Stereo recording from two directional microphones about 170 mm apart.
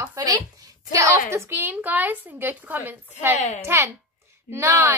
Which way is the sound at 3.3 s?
45° left (ahead or behind).